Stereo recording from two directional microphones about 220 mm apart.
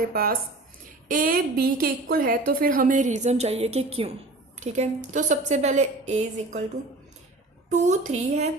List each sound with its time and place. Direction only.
0.1 s a woman's voice: 40° right (ahead or behind)
7.7 s a woman's voice: 30° right (ahead or behind)